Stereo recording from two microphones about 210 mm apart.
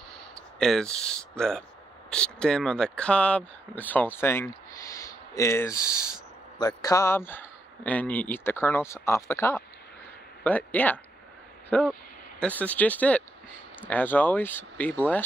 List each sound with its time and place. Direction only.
0.6 s a man's voice: 5° left (ahead or behind)